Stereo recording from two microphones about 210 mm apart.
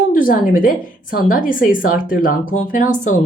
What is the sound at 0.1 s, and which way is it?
A woman's voice, 40° left (ahead or behind).